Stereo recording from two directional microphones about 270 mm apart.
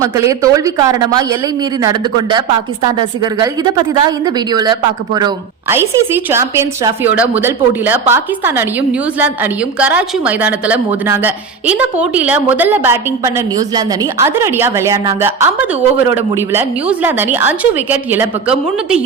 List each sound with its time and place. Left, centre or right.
0.0 s a woman's voice: centre